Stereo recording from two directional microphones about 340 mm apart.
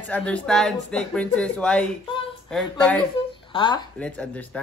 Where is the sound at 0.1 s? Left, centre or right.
Centre.